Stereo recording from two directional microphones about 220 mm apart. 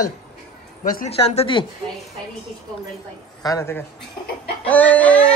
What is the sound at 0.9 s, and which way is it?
Speech, 30° left (ahead or behind).